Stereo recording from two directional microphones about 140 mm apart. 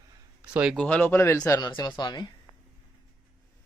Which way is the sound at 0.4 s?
5° right (ahead or behind).